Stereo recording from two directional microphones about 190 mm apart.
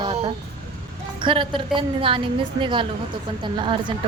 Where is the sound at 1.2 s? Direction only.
25° right (ahead or behind).